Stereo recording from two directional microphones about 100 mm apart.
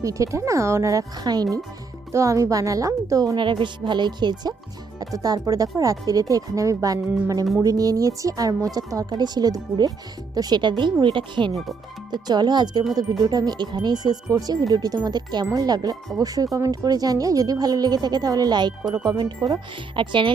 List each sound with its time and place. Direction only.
0.0 s speech: 30° right (ahead or behind)
3.3 s speech: 55° right (ahead or behind)
20.0 s speech: 55° right (ahead or behind)